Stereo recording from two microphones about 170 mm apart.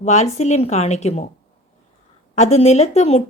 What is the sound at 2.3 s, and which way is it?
Speech, 40° left (ahead or behind).